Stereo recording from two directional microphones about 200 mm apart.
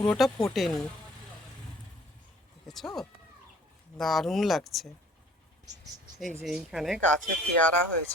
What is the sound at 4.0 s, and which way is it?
Speech, centre (ahead or behind).